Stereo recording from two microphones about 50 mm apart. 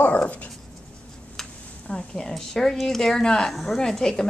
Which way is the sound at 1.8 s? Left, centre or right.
Centre.